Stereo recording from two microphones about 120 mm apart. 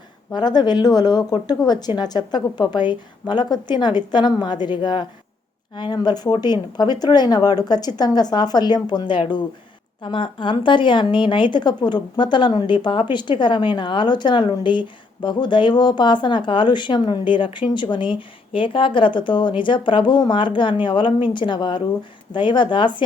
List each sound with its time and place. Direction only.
0.3 s a woman's voice: 35° left (ahead or behind)